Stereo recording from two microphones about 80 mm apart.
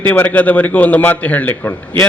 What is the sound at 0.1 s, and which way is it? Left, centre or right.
A man's voice, centre.